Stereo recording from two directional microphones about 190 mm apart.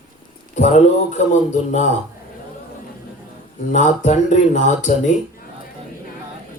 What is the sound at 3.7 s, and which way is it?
Speech, 40° left (ahead or behind).